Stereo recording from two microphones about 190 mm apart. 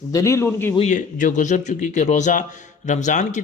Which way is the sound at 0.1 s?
15° left (ahead or behind).